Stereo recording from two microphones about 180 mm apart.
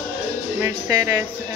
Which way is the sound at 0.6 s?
20° right (ahead or behind).